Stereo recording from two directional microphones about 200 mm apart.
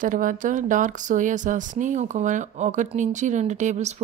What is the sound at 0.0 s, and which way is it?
Speech, 40° right (ahead or behind).